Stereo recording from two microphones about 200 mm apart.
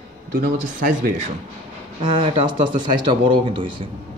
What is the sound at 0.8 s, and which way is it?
Speech, 40° right (ahead or behind).